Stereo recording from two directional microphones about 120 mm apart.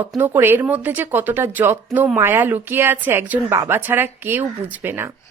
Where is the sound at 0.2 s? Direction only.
20° right (ahead or behind).